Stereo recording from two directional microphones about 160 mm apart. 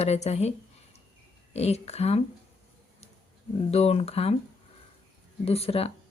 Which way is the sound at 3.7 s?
40° left (ahead or behind).